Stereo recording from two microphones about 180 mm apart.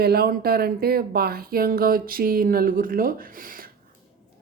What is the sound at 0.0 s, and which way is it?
Speech, 60° right (ahead or behind).